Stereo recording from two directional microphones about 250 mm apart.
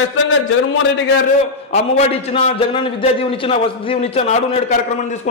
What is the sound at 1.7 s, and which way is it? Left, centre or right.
A man's voice, left.